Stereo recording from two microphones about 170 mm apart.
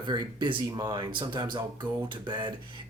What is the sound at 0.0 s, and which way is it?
Speech, 25° right (ahead or behind).